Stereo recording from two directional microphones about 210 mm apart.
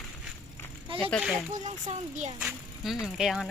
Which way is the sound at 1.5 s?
35° right (ahead or behind).